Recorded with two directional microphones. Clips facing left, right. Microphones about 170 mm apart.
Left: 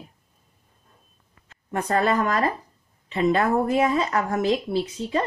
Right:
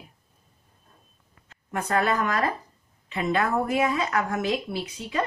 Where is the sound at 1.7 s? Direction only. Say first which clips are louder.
Left 3 dB; 35° left (ahead or behind).